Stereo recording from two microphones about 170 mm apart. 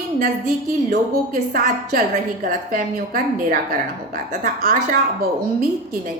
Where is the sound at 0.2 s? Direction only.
55° right (ahead or behind).